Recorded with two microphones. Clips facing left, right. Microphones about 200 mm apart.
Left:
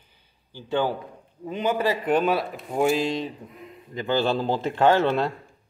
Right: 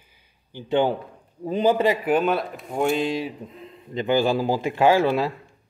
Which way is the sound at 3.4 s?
25° right (ahead or behind).